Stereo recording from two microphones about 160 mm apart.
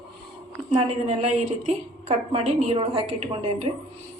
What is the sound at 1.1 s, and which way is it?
A woman's voice, 45° right (ahead or behind).